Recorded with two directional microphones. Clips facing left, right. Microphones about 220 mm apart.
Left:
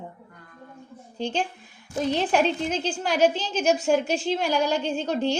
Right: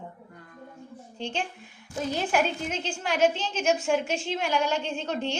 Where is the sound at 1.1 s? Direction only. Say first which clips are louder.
Left 5 dB; 40° left (ahead or behind).